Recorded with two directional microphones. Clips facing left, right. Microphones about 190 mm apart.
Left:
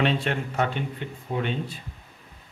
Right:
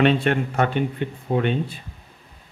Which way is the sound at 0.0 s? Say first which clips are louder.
Right 6 dB; 60° right (ahead or behind).